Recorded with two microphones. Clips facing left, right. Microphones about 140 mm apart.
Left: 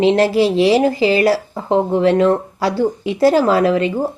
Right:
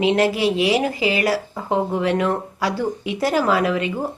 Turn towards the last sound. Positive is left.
turn(degrees=30)  # may be behind; listen again after turning